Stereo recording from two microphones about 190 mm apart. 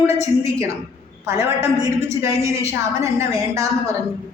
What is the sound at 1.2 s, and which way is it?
A woman's voice, 15° right (ahead or behind).